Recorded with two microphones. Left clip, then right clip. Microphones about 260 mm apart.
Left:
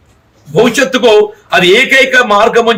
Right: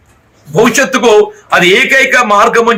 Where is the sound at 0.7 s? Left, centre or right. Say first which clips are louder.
Even; centre.